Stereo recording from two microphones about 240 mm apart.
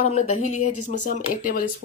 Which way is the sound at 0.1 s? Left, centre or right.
Left.